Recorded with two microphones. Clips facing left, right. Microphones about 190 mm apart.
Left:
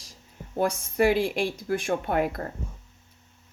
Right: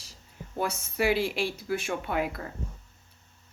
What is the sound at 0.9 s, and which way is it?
Speech, 50° left (ahead or behind).